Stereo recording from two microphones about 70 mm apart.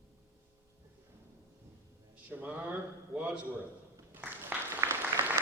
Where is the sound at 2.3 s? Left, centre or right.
Right.